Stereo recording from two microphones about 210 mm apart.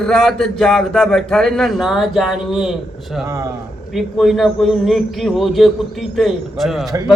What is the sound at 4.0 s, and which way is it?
A man's voice, centre (ahead or behind).